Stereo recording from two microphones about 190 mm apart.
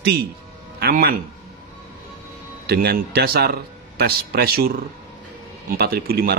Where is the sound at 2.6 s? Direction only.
55° right (ahead or behind).